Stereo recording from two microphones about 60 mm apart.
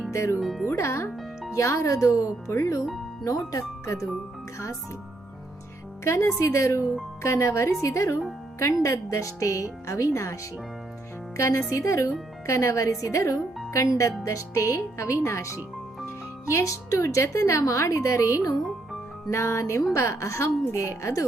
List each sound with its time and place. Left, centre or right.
0.1 s speech: left
0.3 s speech: centre
0.8 s a woman's voice: left
2.5 s a woman's voice: left
3.2 s a woman's voice: left
6.1 s a woman's voice: left
11.3 s a woman's voice: left
14.3 s a woman's voice: left